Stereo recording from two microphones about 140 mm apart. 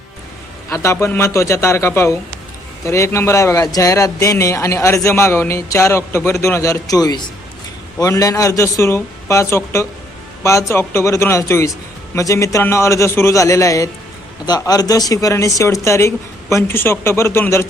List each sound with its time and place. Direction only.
0.7 s speech: 20° left (ahead or behind)